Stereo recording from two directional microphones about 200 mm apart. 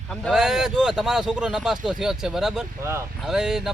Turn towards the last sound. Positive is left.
turn(degrees=0)  # may be behind; listen again after turning